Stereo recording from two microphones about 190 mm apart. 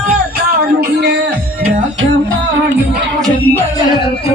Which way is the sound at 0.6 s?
65° right (ahead or behind).